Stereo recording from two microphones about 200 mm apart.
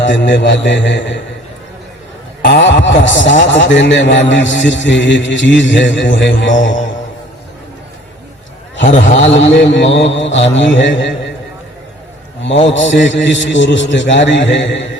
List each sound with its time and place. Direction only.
0.0 s a man's voice: 65° left (ahead or behind)
2.4 s a man's voice: 60° left (ahead or behind)
8.8 s a man's voice: 40° left (ahead or behind)
9.7 s a man's voice: 65° left (ahead or behind)
12.4 s a man's voice: 65° left (ahead or behind)